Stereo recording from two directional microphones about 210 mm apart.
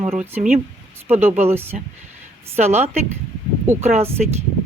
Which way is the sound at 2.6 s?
30° right (ahead or behind).